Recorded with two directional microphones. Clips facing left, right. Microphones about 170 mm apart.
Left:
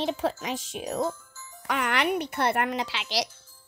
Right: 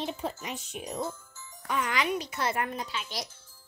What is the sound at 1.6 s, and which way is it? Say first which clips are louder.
A child's voice: left 3 dB; 70° left (ahead or behind).